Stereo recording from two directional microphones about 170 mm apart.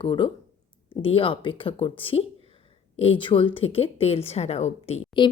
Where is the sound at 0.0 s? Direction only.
30° left (ahead or behind).